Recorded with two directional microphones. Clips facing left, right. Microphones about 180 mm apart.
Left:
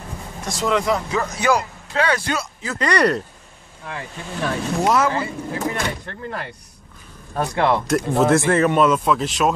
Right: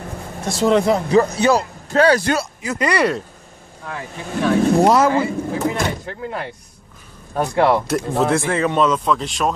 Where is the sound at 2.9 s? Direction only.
5° right (ahead or behind).